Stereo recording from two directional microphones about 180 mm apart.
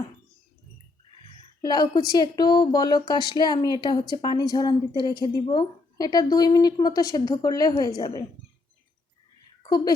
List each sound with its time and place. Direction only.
1.6 s a woman's voice: 25° left (ahead or behind)
9.6 s speech: 25° left (ahead or behind)